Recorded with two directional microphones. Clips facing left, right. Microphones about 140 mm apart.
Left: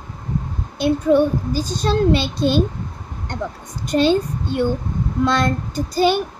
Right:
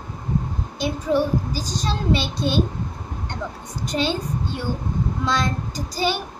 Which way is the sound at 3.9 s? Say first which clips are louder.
Left 7 dB; 50° left (ahead or behind).